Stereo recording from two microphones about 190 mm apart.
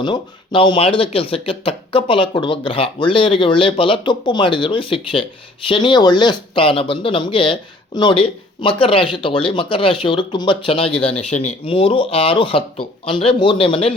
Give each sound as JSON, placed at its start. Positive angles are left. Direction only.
{"t": 0.0, "sound": "speech", "side_deg": 25}